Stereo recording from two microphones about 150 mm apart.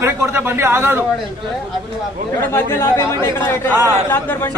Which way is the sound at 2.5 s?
15° left (ahead or behind).